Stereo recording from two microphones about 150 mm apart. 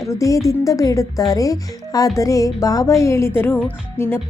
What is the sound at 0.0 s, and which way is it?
Speech, 20° left (ahead or behind).